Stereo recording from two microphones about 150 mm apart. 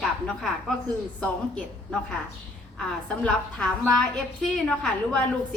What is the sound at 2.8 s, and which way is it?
A woman's voice, 5° left (ahead or behind).